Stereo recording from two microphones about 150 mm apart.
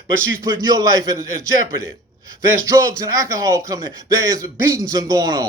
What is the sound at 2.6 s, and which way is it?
Speech, 20° right (ahead or behind).